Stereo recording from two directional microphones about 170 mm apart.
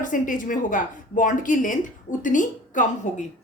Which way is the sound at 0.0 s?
50° left (ahead or behind).